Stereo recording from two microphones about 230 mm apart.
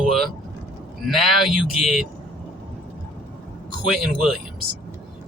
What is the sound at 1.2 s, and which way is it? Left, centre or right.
Speech, centre.